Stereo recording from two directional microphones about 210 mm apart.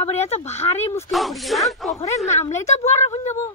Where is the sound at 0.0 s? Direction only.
30° left (ahead or behind).